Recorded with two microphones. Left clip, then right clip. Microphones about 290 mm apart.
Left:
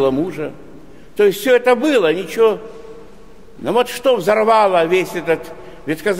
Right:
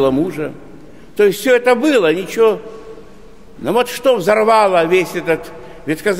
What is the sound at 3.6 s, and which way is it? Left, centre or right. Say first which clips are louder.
A man's voice: right 1 dB; centre.